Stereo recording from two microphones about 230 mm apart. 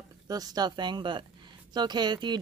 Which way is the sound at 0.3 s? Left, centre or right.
Centre.